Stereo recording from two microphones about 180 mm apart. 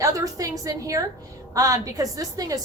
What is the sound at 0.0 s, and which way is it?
A woman's voice, 20° right (ahead or behind).